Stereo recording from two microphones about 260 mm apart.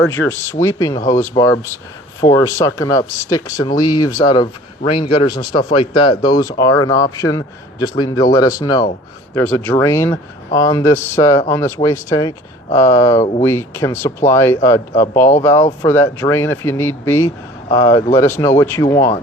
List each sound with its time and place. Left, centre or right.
0.0 s a man's voice: centre